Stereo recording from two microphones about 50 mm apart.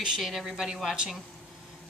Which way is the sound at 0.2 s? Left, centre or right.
Centre.